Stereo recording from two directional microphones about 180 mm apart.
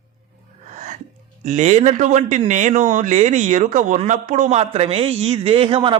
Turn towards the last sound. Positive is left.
turn(degrees=-30)  # may be behind; listen again after turning